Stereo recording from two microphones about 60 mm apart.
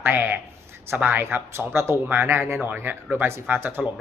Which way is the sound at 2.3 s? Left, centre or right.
Right.